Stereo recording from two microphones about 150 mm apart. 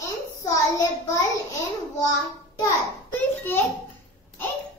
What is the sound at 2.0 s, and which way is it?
Child singing, 25° left (ahead or behind).